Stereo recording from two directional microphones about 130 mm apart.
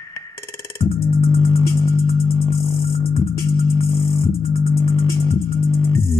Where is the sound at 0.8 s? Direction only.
50° left (ahead or behind).